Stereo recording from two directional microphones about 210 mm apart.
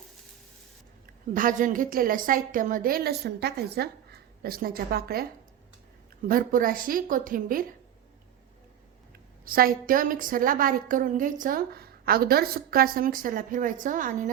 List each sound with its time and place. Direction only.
1.4 s a woman's voice: 40° right (ahead or behind)
9.4 s a woman's voice: 45° right (ahead or behind)